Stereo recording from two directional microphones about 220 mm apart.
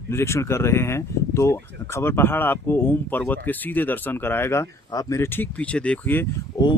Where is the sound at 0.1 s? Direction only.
10° left (ahead or behind).